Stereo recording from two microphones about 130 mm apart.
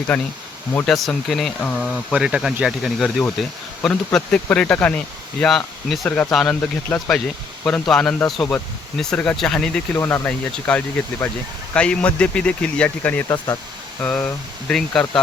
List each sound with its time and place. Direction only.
0.1 s speech: 10° left (ahead or behind)
2.1 s speech: 5° right (ahead or behind); by 13.2 s 10° left (ahead or behind)
13.2 s speech: 30° left (ahead or behind)
14.0 s speech: 10° left (ahead or behind)